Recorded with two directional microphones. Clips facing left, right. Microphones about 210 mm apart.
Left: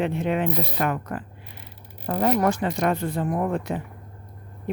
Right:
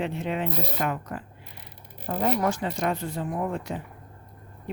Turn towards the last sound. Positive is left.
turn(degrees=55)  # may be behind; listen again after turning